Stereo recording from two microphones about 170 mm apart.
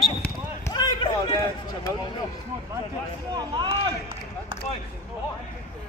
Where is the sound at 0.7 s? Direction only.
25° left (ahead or behind).